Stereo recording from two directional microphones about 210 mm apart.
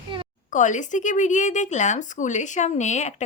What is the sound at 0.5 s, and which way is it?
Speech, 35° left (ahead or behind).